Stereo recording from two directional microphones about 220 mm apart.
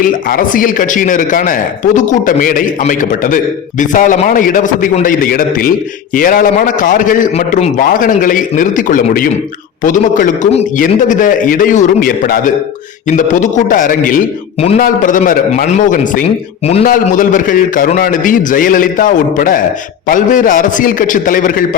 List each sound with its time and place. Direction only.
0.0 s a man's voice: 40° left (ahead or behind)